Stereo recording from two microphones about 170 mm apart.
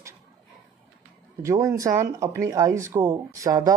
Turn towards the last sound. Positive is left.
turn(degrees=-20)  # may be behind; listen again after turning